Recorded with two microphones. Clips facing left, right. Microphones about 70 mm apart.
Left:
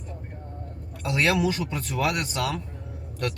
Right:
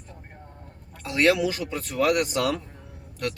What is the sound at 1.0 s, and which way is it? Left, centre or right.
Speech, centre.